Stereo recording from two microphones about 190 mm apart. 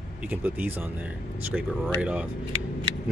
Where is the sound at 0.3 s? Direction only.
10° right (ahead or behind).